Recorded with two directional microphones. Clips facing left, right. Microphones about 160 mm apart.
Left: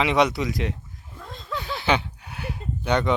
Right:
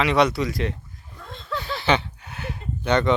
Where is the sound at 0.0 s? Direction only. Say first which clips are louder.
Right 1 dB; 15° left (ahead or behind).